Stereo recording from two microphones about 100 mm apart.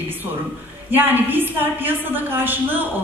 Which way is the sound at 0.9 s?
20° right (ahead or behind).